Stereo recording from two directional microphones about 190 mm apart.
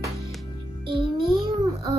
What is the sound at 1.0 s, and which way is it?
Babbling, 25° right (ahead or behind).